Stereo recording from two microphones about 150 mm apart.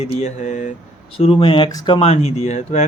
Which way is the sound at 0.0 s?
50° left (ahead or behind).